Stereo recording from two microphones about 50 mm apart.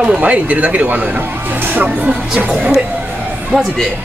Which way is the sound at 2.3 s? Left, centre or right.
Centre.